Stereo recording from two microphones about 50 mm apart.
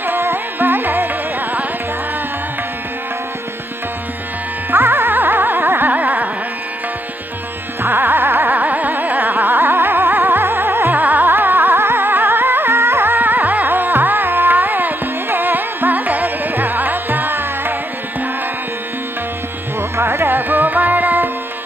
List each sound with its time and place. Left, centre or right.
0.0 s carnatic music: right
4.6 s carnatic music: right
7.8 s carnatic music: right
11.0 s music: right
20.0 s music: right